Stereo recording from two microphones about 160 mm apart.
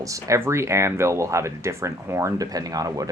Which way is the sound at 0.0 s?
20° right (ahead or behind).